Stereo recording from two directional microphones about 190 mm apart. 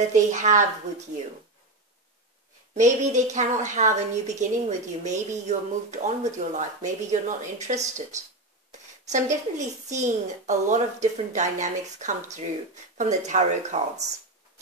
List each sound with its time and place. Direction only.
0.1 s a woman's voice: 40° right (ahead or behind)
2.7 s a woman's voice: 40° right (ahead or behind)
9.1 s a woman's voice: 40° right (ahead or behind)